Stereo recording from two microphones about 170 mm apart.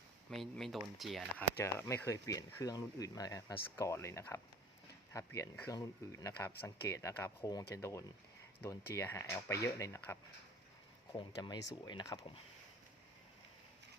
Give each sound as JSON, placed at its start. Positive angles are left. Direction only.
{"t": 0.3, "sound": "speech", "side_deg": 0}
{"t": 1.5, "sound": "speech", "side_deg": 15}
{"t": 11.7, "sound": "speech", "side_deg": 25}